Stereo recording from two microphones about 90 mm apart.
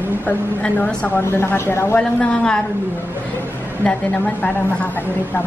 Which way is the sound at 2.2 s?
10° left (ahead or behind).